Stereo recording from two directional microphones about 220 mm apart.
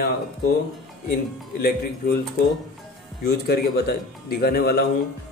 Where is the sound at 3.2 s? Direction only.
45° left (ahead or behind).